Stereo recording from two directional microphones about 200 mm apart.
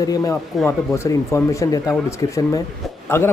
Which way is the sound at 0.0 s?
15° left (ahead or behind).